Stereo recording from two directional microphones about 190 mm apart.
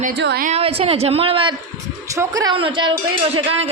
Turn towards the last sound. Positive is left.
turn(degrees=-30)  # may be behind; listen again after turning